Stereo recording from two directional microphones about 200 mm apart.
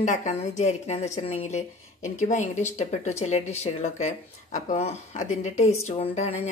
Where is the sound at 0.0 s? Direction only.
35° left (ahead or behind).